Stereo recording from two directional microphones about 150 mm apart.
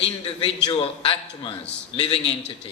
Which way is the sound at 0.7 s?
35° left (ahead or behind).